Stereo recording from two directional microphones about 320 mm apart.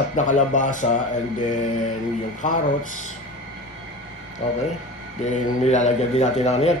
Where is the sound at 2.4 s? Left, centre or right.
Left.